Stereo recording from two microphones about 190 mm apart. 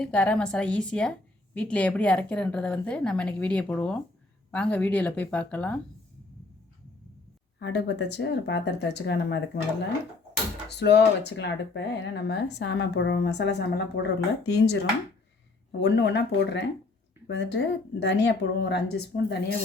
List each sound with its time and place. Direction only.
0.0 s a woman's voice: 5° left (ahead or behind)
7.6 s speech: 65° left (ahead or behind)
10.7 s speech: 60° left (ahead or behind)
15.8 s speech: 65° left (ahead or behind)